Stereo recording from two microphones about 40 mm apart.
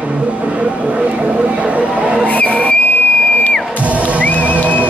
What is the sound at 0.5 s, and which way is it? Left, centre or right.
Speech, right.